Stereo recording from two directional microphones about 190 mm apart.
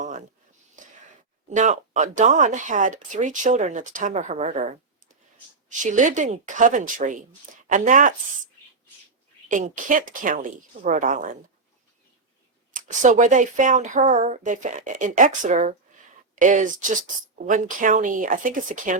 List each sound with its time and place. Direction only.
1.5 s speech: 40° right (ahead or behind)
9.5 s speech: 45° right (ahead or behind)
12.7 s speech: 40° right (ahead or behind)